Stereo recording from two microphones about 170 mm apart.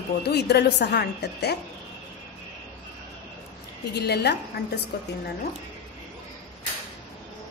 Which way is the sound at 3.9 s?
75° left (ahead or behind).